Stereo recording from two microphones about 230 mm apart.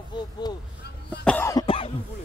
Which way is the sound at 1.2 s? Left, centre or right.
Centre.